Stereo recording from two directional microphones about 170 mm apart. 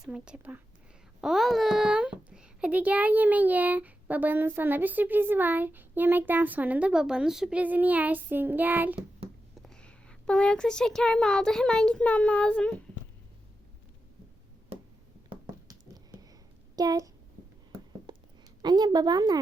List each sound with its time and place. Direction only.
0.0 s a child's voice: 5° right (ahead or behind)
9.6 s a child's voice: 5° left (ahead or behind)
16.7 s speech: 20° right (ahead or behind)
18.1 s a sound: 25° right (ahead or behind)
18.6 s a woman's voice: 25° right (ahead or behind)